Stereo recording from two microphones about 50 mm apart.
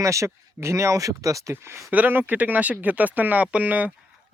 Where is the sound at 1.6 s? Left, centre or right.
Right.